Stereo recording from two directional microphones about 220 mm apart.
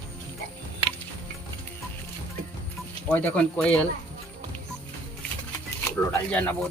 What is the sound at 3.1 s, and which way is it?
Speech, 5° left (ahead or behind).